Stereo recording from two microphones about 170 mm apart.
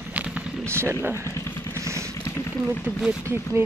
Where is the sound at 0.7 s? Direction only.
15° right (ahead or behind).